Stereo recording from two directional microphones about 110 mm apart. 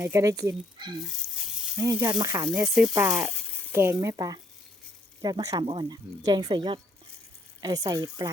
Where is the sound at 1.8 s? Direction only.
30° right (ahead or behind).